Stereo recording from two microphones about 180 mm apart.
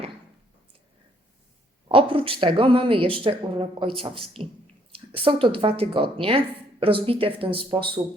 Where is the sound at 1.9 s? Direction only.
30° right (ahead or behind).